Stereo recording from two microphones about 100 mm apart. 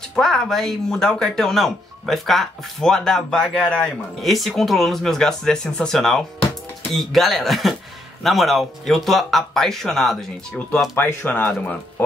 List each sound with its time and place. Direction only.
0.1 s speech: 5° left (ahead or behind)
11.0 s speech: 20° left (ahead or behind)